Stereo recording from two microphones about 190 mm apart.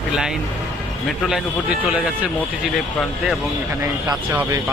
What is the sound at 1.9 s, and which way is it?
Speech, 5° right (ahead or behind).